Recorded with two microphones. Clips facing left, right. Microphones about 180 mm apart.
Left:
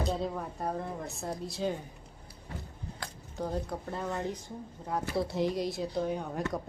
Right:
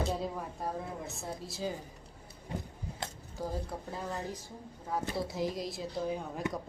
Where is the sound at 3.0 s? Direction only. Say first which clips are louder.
Right 3 dB; 25° right (ahead or behind).